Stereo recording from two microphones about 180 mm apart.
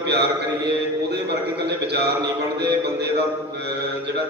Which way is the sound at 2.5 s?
65° right (ahead or behind).